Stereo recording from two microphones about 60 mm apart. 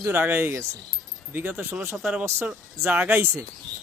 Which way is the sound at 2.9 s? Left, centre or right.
Right.